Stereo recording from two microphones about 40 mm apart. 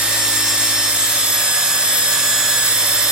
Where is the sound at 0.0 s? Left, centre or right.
Right.